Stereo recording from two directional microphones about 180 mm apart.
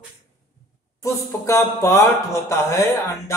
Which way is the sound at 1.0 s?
15° left (ahead or behind).